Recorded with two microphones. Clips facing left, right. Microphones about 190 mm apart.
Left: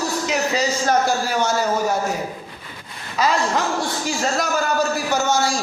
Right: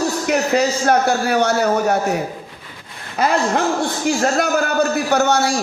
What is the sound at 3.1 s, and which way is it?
Speech, 55° right (ahead or behind).